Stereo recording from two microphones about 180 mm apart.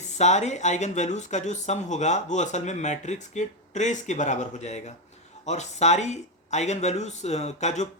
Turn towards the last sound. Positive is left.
turn(degrees=40)  # may be behind; listen again after turning